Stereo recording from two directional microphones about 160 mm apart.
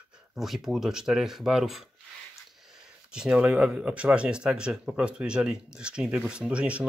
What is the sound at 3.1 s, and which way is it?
Speech, 5° right (ahead or behind).